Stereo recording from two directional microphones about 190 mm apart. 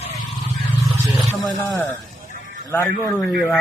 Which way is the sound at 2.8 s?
Centre (ahead or behind).